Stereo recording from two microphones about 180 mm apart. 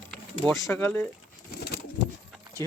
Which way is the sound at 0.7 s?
10° left (ahead or behind).